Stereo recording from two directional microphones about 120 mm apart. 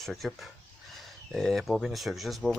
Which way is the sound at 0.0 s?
Centre (ahead or behind).